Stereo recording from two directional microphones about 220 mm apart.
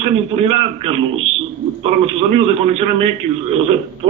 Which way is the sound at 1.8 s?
25° right (ahead or behind).